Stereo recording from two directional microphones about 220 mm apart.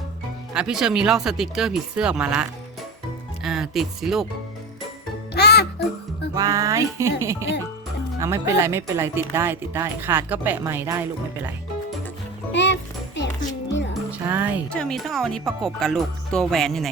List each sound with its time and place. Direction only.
0.5 s speech: 5° right (ahead or behind)
5.3 s music: 45° left (ahead or behind)
6.3 s speech: 15° right (ahead or behind)
12.5 s music: 55° left (ahead or behind)
14.1 s speech: 10° right (ahead or behind)
14.7 s speech: 5° left (ahead or behind)